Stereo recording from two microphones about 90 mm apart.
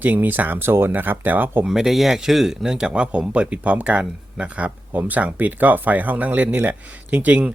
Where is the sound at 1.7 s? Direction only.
5° right (ahead or behind).